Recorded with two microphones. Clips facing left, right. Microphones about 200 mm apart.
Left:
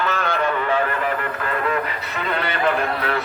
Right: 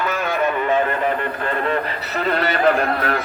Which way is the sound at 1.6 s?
35° right (ahead or behind).